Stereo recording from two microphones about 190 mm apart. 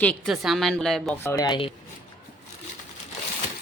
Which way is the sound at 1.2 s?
15° left (ahead or behind).